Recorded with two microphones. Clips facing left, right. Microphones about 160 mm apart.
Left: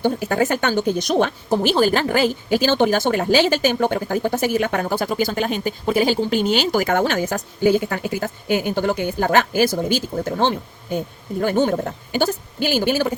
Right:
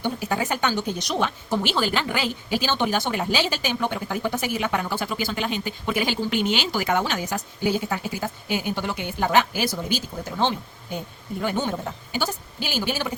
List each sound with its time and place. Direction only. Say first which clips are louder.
0.0 s speech: left 7 dB; 50° left (ahead or behind)